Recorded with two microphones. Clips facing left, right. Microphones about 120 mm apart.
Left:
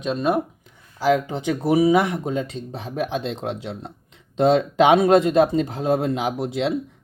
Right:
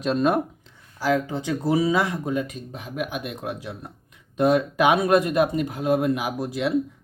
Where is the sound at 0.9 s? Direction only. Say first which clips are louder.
Left 3 dB; 20° left (ahead or behind).